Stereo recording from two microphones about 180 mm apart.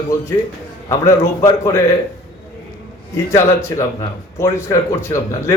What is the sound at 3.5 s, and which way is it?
A man's voice, 15° left (ahead or behind).